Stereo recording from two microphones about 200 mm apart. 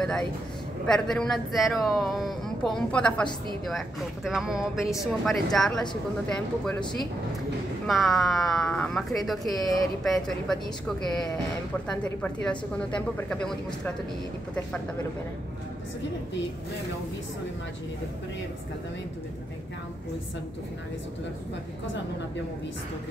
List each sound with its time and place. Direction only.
0.0 s speech: 5° left (ahead or behind)
7.8 s speech: centre (ahead or behind)
11.9 s speech: 5° left (ahead or behind)